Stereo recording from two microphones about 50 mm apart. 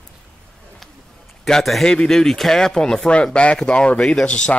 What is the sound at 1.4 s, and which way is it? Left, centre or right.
A man's voice, centre.